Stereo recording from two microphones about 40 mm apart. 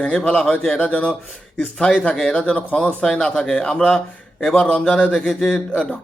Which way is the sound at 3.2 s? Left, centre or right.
Centre.